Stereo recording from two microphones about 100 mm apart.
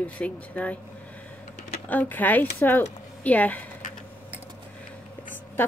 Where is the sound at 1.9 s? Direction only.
20° left (ahead or behind).